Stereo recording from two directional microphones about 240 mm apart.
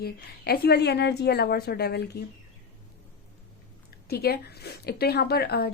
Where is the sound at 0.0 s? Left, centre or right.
Left.